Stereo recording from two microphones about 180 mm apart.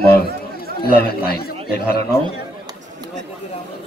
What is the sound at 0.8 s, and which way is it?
Speech, 60° left (ahead or behind).